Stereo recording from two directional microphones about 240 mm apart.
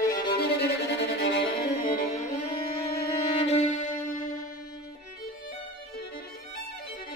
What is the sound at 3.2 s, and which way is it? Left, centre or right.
Music, left.